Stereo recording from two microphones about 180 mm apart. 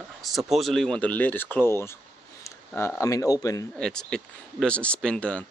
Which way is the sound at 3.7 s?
5° left (ahead or behind).